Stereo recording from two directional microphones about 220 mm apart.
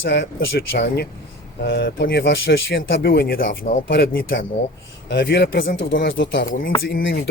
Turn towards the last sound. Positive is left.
turn(degrees=50)  # may be behind; listen again after turning